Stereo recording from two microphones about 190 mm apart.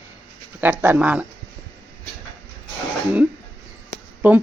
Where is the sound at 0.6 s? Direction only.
10° right (ahead or behind).